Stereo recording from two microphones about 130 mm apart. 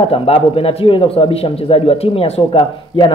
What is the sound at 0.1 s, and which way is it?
Speech, 45° left (ahead or behind).